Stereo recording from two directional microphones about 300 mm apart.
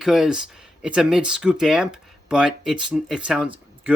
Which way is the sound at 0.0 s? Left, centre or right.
Centre.